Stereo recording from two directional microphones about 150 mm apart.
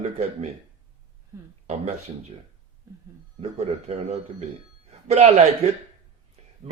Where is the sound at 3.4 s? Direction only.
45° right (ahead or behind).